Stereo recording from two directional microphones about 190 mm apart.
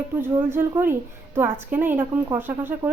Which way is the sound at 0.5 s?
10° right (ahead or behind).